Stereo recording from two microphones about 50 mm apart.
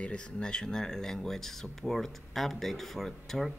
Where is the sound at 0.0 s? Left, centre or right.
Left.